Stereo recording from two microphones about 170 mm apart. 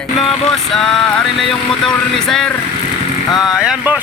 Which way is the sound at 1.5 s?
5° left (ahead or behind).